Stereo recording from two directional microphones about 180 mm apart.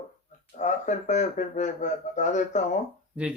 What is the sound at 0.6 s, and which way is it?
A man's voice, 45° left (ahead or behind).